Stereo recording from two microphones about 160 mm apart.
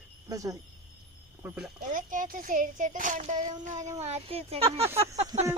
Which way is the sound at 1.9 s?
55° right (ahead or behind).